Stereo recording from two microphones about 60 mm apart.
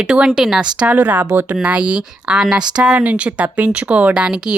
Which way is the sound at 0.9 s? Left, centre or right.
Right.